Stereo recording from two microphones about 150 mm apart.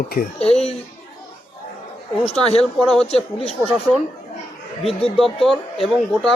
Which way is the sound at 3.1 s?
40° left (ahead or behind).